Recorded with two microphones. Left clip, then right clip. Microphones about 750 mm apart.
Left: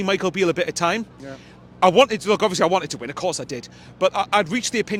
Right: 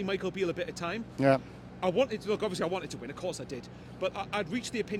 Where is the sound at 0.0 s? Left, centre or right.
Left.